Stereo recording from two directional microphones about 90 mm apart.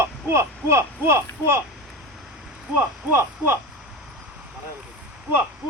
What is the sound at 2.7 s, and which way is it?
Speech, 25° right (ahead or behind).